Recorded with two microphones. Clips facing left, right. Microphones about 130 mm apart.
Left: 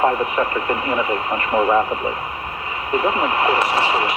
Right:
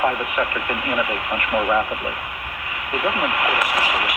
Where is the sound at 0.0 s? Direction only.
30° left (ahead or behind).